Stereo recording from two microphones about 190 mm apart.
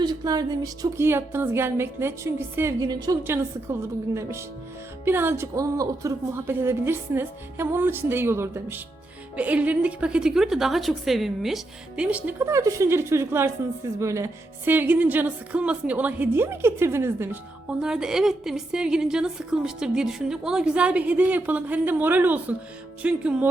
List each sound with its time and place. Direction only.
0.0 s a woman's voice: 20° right (ahead or behind)